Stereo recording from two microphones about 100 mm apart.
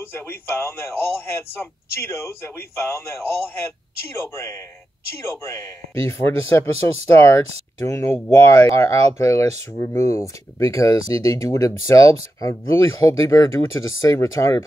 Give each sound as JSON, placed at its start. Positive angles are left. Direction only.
{"t": 0.0, "sound": "speech", "side_deg": 25}